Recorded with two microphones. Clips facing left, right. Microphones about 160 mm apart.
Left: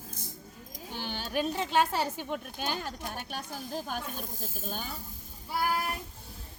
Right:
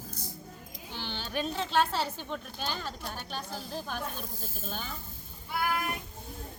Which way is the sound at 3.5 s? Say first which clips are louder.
Left 2 dB; 45° left (ahead or behind).